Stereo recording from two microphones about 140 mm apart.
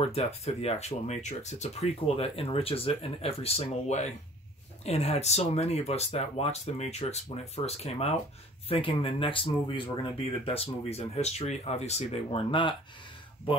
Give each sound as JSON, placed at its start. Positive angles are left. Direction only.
{"t": 0.0, "sound": "speech", "side_deg": 50}